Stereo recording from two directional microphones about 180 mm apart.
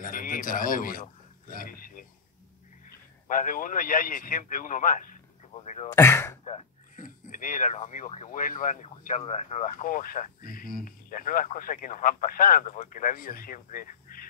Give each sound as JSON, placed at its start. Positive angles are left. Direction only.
{"t": 0.0, "sound": "a sound", "side_deg": 50}
{"t": 3.3, "sound": "speech", "side_deg": 50}
{"t": 5.9, "sound": "speech", "side_deg": 15}
{"t": 6.4, "sound": "dishes", "side_deg": 35}
{"t": 7.2, "sound": "speech", "side_deg": 50}